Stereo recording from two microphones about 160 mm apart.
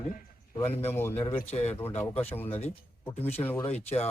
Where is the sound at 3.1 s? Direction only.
40° left (ahead or behind).